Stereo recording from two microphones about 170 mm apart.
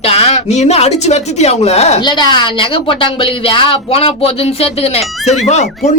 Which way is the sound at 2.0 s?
25° left (ahead or behind).